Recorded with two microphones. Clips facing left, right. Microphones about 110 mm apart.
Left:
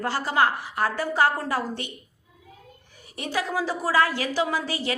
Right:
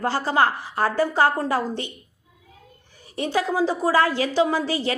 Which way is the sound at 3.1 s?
30° right (ahead or behind).